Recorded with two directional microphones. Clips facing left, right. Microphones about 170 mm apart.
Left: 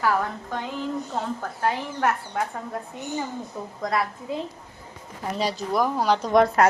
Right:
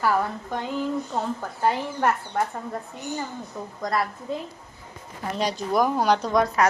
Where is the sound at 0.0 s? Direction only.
10° right (ahead or behind).